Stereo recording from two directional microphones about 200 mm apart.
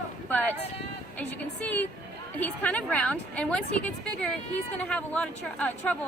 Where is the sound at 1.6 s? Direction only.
10° left (ahead or behind).